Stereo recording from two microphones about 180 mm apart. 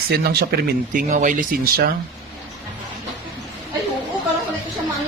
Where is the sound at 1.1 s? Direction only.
45° right (ahead or behind).